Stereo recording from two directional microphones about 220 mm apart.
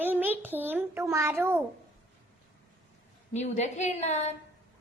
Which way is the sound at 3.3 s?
30° left (ahead or behind).